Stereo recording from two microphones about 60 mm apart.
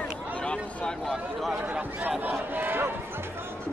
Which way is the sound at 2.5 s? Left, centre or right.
Right.